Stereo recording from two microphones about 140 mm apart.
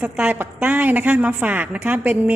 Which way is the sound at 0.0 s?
15° right (ahead or behind).